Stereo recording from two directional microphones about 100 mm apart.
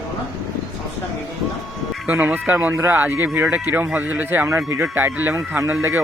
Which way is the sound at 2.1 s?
15° right (ahead or behind).